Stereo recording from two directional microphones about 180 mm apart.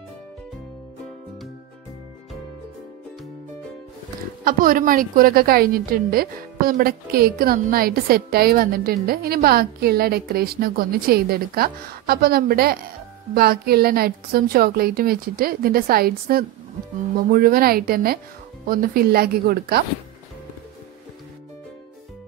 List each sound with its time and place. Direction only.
4.5 s a woman's voice: 50° right (ahead or behind)